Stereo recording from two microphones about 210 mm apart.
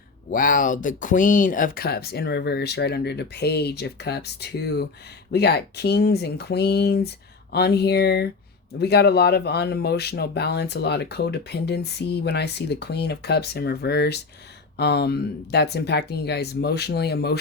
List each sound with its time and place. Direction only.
0.3 s speech: 40° left (ahead or behind)